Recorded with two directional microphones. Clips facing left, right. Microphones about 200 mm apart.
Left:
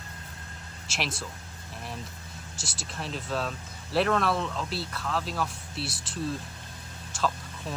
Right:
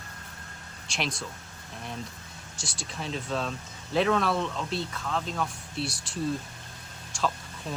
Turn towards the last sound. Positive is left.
turn(degrees=0)  # may be behind; listen again after turning